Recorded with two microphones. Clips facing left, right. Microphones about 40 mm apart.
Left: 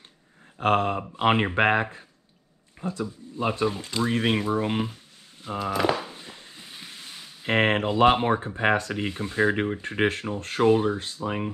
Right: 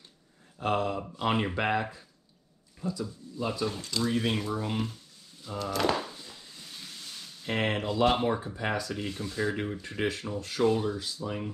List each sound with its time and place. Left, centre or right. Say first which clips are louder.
0.6 s speech: left 6 dB; left
3.6 s speech: left 5 dB; left
5.6 s speech: left 3 dB; centre
6.0 s a sound: left 3 dB; left
7.4 s speech: left 7 dB; left